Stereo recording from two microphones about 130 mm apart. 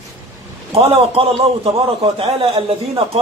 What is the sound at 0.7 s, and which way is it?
A man's voice, 50° right (ahead or behind).